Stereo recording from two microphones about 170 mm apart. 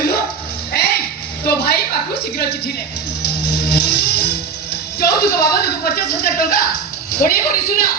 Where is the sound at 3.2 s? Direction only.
70° left (ahead or behind).